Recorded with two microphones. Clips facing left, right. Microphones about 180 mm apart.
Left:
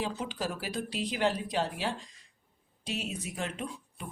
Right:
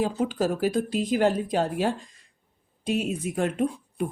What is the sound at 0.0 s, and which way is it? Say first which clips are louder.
Speech: right 9 dB; 45° right (ahead or behind).